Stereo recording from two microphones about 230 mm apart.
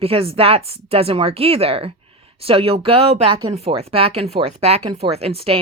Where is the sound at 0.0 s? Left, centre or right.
Right.